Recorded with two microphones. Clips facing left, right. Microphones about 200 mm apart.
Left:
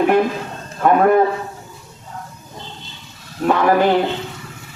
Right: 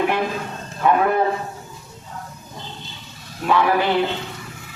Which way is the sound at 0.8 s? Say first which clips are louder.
Left 5 dB; 45° left (ahead or behind).